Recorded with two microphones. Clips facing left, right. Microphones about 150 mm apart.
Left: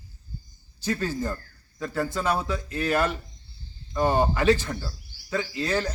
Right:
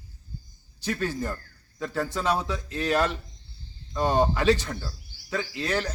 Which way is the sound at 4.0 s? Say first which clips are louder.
Left 1 dB; 5° left (ahead or behind).